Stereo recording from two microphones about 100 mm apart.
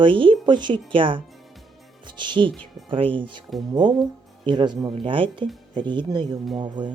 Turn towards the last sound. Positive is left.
turn(degrees=-50)  # may be behind; listen again after turning